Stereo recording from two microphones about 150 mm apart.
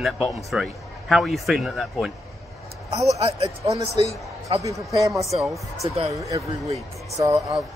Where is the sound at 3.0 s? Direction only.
45° right (ahead or behind).